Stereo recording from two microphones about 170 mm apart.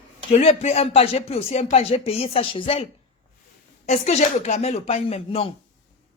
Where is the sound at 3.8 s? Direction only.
40° left (ahead or behind).